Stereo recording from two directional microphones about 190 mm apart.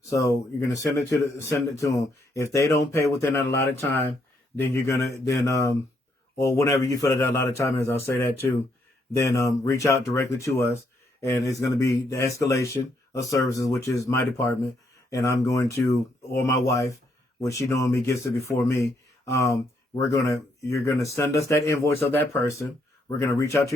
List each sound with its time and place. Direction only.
0.1 s speech: 15° left (ahead or behind)